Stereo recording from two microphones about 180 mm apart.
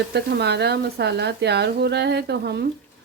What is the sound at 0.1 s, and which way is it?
Speech, 70° right (ahead or behind).